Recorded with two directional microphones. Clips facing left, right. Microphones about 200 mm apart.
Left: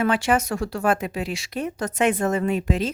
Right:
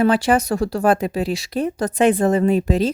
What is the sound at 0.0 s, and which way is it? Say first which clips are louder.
Speech: right 5 dB; 35° right (ahead or behind).